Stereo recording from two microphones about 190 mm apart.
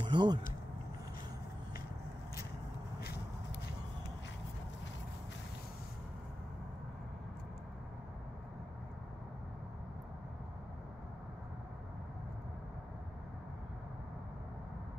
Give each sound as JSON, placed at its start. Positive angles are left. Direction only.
{"t": 0.0, "sound": "speech", "side_deg": -25}